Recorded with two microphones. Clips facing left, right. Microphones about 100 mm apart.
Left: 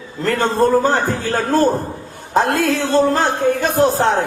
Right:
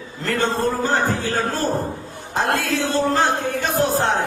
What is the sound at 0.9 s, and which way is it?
Speech, 50° left (ahead or behind).